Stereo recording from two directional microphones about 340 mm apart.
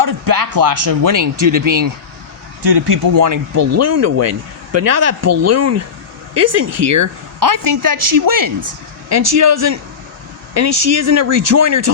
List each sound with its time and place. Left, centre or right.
0.0 s a sound: right
0.9 s speech: right
2.8 s speech: right
9.0 s speech: right